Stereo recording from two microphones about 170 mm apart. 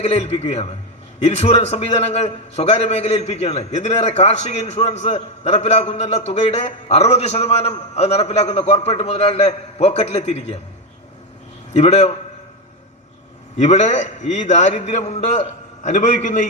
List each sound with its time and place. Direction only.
0.0 s a man's voice: 40° left (ahead or behind)
11.7 s a man's voice: 40° left (ahead or behind)
13.6 s a man's voice: 45° left (ahead or behind)